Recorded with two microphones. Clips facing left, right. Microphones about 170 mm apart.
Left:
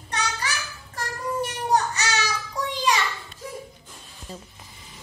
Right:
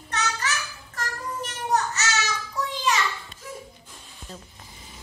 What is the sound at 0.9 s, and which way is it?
Child singing, 10° left (ahead or behind).